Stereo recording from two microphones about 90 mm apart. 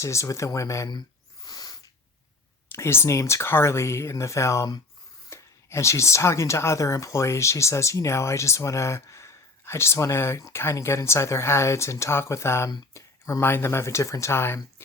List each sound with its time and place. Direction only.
0.0 s speech: 35° left (ahead or behind)
0.9 s a sound: 50° left (ahead or behind)
2.7 s speech: 30° left (ahead or behind)